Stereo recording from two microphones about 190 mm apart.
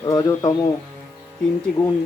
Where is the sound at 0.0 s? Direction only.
20° left (ahead or behind).